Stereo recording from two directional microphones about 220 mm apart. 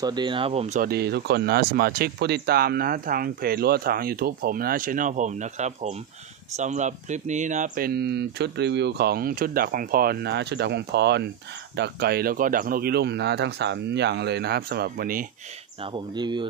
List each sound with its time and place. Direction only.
0.0 s speech: 20° right (ahead or behind)
0.8 s speech: 45° right (ahead or behind)
15.8 s speech: 20° right (ahead or behind)